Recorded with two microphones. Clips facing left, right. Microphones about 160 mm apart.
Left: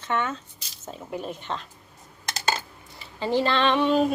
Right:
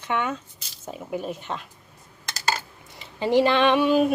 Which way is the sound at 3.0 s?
15° right (ahead or behind).